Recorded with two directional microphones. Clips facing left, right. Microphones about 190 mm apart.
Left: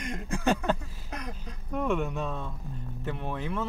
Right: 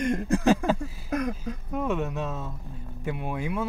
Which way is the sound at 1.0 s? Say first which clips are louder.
Right 11 dB; 50° right (ahead or behind).